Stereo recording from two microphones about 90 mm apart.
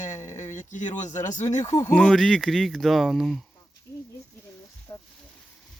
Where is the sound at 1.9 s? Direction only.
10° left (ahead or behind).